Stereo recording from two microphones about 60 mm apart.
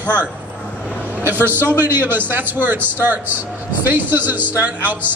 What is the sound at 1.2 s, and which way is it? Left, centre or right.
A man's voice, right.